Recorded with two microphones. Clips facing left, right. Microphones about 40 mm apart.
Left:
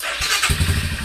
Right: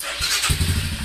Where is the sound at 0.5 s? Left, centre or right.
Left.